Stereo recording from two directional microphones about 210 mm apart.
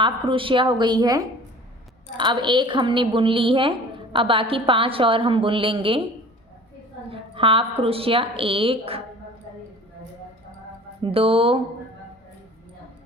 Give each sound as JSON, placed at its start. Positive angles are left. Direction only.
{"t": 0.0, "sound": "a woman's voice", "side_deg": -25}
{"t": 7.1, "sound": "a woman's voice", "side_deg": -25}
{"t": 11.0, "sound": "a woman's voice", "side_deg": -25}